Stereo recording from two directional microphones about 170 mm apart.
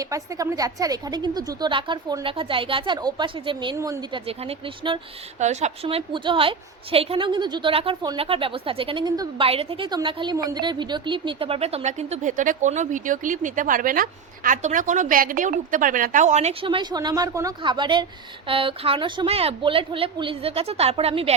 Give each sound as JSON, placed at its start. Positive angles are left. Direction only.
{"t": 0.0, "sound": "a woman's voice", "side_deg": -20}
{"t": 3.8, "sound": "speech", "side_deg": -15}
{"t": 4.1, "sound": "a woman's voice", "side_deg": -35}
{"t": 5.4, "sound": "a woman's voice", "side_deg": -45}